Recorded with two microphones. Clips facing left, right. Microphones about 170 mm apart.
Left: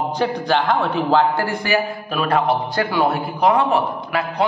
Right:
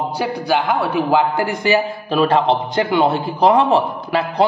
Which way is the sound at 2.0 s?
30° right (ahead or behind).